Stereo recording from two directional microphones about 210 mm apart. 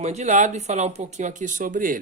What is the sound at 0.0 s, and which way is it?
Speech, 35° right (ahead or behind).